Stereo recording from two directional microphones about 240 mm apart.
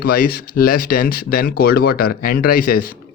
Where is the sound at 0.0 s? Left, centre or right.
Left.